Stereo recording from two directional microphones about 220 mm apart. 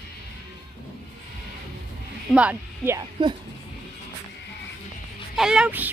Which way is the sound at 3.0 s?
20° right (ahead or behind).